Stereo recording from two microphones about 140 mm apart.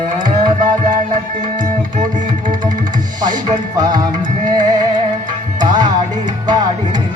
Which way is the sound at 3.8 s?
30° right (ahead or behind).